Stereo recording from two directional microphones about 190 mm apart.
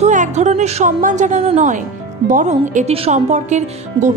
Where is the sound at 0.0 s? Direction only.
40° right (ahead or behind).